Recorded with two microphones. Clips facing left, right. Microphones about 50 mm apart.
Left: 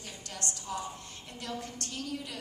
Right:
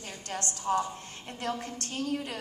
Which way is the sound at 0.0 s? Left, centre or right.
Right.